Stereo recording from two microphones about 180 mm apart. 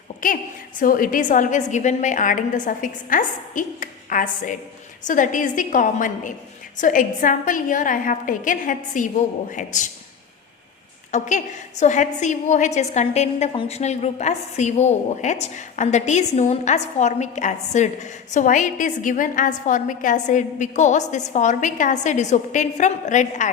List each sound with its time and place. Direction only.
0.2 s a woman's voice: 50° left (ahead or behind)
11.1 s a woman's voice: 40° left (ahead or behind)